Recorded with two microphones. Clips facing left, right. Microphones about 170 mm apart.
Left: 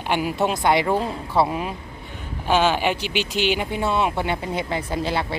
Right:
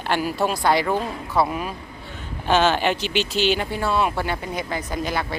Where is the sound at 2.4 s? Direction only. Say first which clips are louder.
Right 1 dB; 10° left (ahead or behind).